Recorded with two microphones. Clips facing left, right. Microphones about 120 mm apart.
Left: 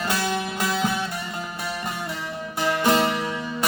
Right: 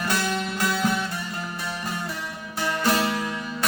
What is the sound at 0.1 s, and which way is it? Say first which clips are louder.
Music: even; 20° left (ahead or behind).